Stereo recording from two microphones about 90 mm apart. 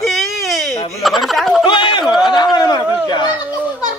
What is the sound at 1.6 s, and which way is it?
Speech, 65° left (ahead or behind).